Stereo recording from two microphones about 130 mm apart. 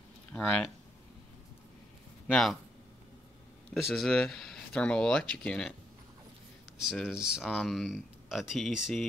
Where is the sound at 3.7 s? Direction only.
Centre (ahead or behind).